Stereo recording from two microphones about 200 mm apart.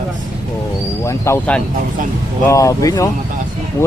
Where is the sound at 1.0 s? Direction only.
15° left (ahead or behind).